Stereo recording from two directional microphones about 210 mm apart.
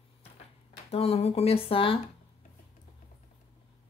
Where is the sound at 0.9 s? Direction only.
30° left (ahead or behind).